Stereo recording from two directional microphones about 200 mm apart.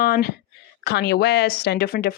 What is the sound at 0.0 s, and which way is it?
Speech, 50° left (ahead or behind).